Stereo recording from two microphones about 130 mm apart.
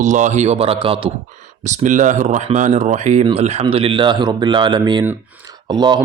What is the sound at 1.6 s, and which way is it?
Speech, 70° right (ahead or behind).